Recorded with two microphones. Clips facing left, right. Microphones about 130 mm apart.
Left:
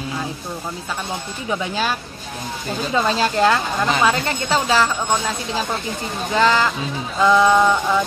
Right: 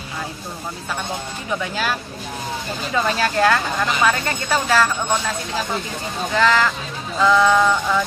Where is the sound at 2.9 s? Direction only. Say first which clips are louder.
Left 1 dB; 25° left (ahead or behind).